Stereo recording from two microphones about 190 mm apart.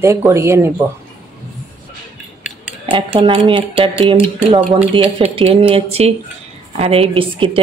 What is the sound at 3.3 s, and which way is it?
A woman's voice, 30° right (ahead or behind).